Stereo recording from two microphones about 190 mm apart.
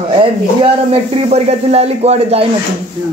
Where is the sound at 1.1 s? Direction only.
35° right (ahead or behind).